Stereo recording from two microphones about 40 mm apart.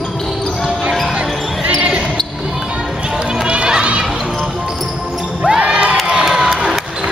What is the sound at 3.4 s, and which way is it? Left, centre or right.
Run, right.